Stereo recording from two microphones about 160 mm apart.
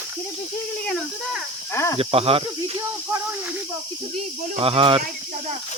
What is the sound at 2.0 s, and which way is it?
Speech, 35° right (ahead or behind).